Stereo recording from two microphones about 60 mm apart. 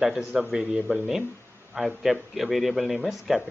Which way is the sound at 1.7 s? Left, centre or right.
Centre.